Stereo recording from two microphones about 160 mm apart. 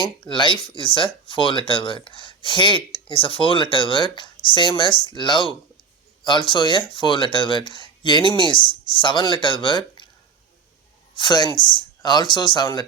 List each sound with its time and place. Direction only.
0.0 s speech: 30° left (ahead or behind)
11.1 s speech: 30° left (ahead or behind)